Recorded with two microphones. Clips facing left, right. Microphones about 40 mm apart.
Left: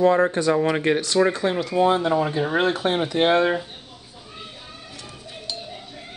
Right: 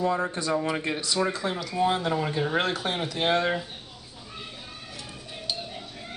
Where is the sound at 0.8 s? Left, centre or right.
Left.